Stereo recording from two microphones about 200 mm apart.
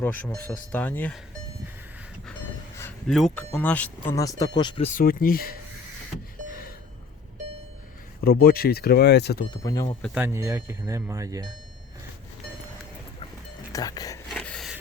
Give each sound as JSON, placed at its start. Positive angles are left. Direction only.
{"t": 0.0, "sound": "speech", "side_deg": 10}
{"t": 3.1, "sound": "speech", "side_deg": 0}
{"t": 4.9, "sound": "speech", "side_deg": 45}
{"t": 8.2, "sound": "speech", "side_deg": 50}
{"t": 9.6, "sound": "speech", "side_deg": 15}
{"t": 10.2, "sound": "speech", "side_deg": -10}
{"t": 13.7, "sound": "speech", "side_deg": 20}
{"t": 14.3, "sound": "a sound", "side_deg": 5}